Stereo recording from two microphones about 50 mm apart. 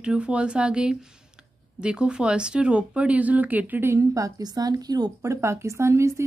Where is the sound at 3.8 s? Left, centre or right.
Right.